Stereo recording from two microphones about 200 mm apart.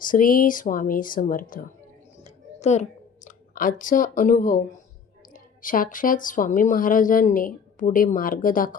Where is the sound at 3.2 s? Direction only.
40° left (ahead or behind).